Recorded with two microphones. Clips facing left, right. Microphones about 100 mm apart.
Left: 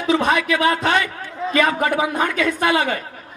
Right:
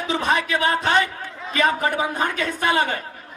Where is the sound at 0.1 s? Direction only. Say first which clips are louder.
Left 4 dB; 30° right (ahead or behind).